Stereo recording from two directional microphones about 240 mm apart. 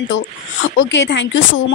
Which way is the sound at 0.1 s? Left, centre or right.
Left.